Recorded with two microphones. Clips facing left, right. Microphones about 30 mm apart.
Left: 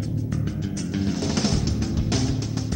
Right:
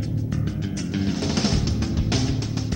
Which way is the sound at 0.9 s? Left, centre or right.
Centre.